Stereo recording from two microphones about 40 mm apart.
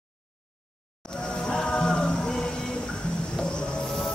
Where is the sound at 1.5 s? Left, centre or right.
Centre.